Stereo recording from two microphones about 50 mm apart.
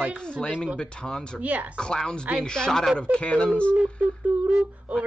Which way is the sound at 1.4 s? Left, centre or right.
Right.